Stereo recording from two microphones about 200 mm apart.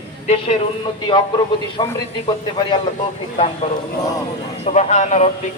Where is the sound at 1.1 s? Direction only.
25° left (ahead or behind).